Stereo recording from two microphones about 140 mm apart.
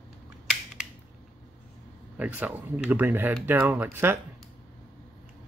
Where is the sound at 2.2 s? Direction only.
10° right (ahead or behind).